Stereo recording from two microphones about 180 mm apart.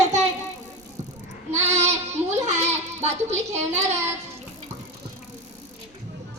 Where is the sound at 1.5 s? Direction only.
35° right (ahead or behind).